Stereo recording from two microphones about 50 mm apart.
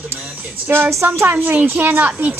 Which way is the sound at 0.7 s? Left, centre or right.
Right.